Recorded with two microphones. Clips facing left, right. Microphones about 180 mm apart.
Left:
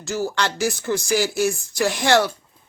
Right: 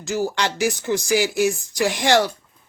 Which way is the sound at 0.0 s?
15° right (ahead or behind).